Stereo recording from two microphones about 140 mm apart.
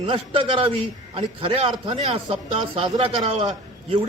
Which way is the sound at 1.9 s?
55° right (ahead or behind).